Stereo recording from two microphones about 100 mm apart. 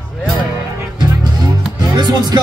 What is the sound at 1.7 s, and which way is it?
Music, 45° right (ahead or behind).